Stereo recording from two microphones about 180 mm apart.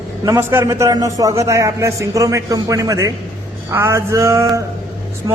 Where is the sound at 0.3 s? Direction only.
15° right (ahead or behind).